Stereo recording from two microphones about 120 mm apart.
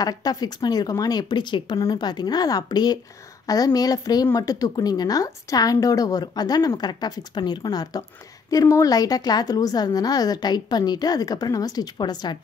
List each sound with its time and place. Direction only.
0.0 s a woman's voice: 30° left (ahead or behind)